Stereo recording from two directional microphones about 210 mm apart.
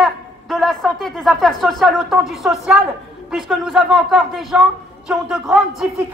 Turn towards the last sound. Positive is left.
turn(degrees=0)  # may be behind; listen again after turning